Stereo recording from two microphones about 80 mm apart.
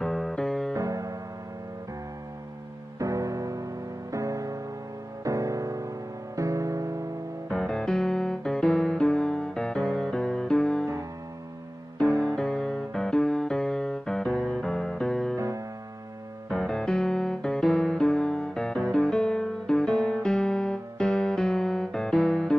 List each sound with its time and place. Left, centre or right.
0.0 s music: centre
0.7 s music: right
3.0 s music: right
7.4 s music: centre
12.0 s music: centre
15.3 s music: right
16.4 s music: centre